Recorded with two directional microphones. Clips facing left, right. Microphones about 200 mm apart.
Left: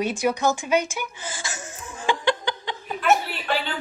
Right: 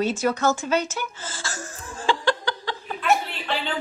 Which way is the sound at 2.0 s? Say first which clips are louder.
Even; 20° left (ahead or behind).